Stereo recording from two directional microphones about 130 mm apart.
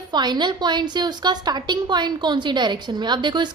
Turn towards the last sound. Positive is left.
turn(degrees=-35)  # may be behind; listen again after turning